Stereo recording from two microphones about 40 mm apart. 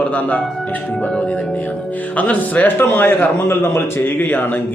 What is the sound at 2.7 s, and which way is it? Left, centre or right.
A man's voice, left.